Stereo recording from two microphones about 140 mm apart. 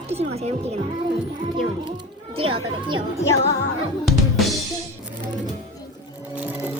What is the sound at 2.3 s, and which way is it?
Children playing, 40° right (ahead or behind).